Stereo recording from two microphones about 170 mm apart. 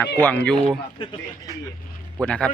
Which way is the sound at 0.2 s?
10° left (ahead or behind).